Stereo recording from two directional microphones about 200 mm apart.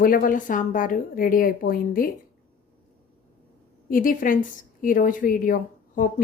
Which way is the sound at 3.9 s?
45° left (ahead or behind).